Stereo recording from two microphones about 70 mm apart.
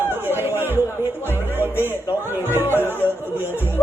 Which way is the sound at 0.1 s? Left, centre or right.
Right.